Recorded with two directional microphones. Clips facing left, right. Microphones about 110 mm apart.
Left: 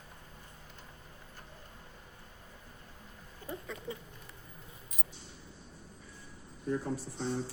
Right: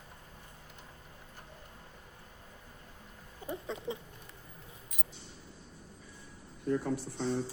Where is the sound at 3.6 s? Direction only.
25° right (ahead or behind).